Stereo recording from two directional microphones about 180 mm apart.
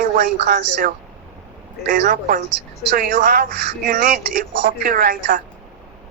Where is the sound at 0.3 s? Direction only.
65° right (ahead or behind).